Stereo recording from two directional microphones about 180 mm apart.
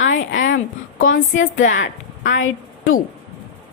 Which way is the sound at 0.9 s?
50° left (ahead or behind).